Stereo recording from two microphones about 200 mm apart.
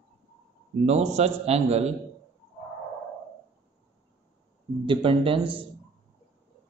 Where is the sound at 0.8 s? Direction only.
35° right (ahead or behind).